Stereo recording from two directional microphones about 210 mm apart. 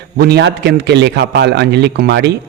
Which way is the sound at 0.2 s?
50° right (ahead or behind).